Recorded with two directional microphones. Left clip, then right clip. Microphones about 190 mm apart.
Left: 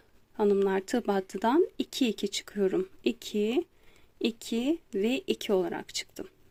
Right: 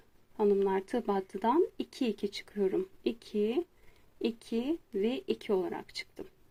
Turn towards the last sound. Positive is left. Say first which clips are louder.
# left 5 dB
turn(degrees=25)  # may be behind; listen again after turning